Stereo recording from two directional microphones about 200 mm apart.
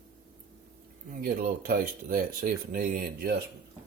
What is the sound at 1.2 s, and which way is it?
Speech, 45° right (ahead or behind).